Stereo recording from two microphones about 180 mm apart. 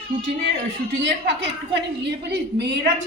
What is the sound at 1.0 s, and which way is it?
Speech, 75° right (ahead or behind).